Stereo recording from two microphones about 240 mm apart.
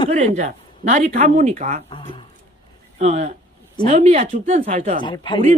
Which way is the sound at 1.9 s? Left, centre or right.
Centre.